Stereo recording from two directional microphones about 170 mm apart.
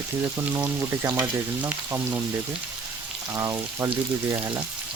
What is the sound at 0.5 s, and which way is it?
Speech, 20° right (ahead or behind).